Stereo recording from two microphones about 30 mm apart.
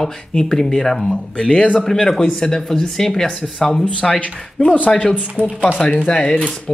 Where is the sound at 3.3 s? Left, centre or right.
Left.